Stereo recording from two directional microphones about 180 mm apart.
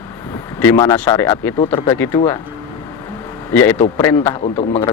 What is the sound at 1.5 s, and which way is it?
Speech, 25° left (ahead or behind).